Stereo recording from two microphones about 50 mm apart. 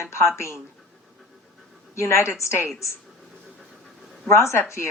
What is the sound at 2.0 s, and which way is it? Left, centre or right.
Speech, left.